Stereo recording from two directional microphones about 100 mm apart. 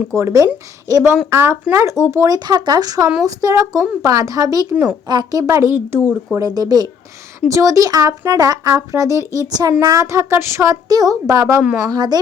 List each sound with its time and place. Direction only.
0.1 s speech: 30° right (ahead or behind)
4.7 s speech: 15° right (ahead or behind)
5.0 s speech: 40° right (ahead or behind); by 6.0 s 25° right (ahead or behind)
6.4 s speech: 40° right (ahead or behind)
11.6 s speech: 10° right (ahead or behind)
11.9 s a woman's voice: 45° right (ahead or behind)